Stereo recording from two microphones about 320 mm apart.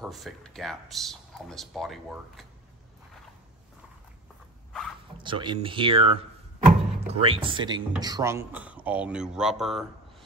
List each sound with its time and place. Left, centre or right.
0.0 s speech: centre
5.2 s speech: centre